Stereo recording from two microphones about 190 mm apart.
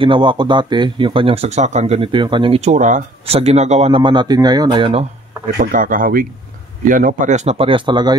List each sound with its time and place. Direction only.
0.0 s speech: 25° right (ahead or behind)
5.6 s speech: 45° right (ahead or behind); by 8.2 s 25° right (ahead or behind)